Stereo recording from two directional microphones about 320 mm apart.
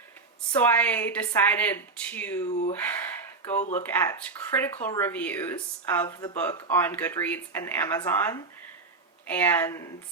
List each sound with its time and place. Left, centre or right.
0.5 s a woman's voice: centre
2.5 s speech: left
3.8 s a woman's voice: centre